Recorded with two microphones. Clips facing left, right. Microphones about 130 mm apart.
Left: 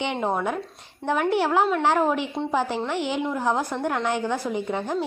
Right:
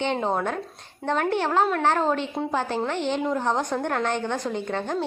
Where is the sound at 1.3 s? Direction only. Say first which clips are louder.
Left 2 dB; 15° left (ahead or behind).